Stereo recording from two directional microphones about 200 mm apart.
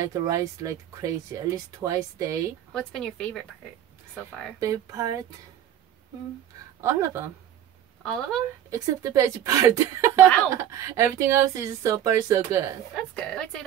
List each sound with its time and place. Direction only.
0.0 s speech: 15° right (ahead or behind)
2.7 s a woman's voice: 5° left (ahead or behind)
4.6 s speech: 15° right (ahead or behind)
6.8 s speech: 15° right (ahead or behind)
8.0 s speech: centre (ahead or behind)
8.6 s speech: 15° right (ahead or behind)
12.9 s a woman's voice: 5° left (ahead or behind)